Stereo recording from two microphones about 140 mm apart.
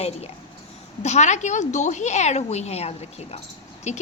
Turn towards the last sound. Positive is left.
turn(degrees=55)  # may be behind; listen again after turning